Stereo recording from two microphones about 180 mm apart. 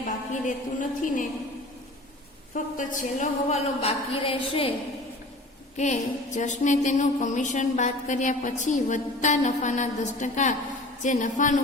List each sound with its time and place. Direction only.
0.4 s a woman's voice: 45° left (ahead or behind)
2.7 s a woman's voice: 45° left (ahead or behind)
5.7 s a woman's voice: 40° left (ahead or behind)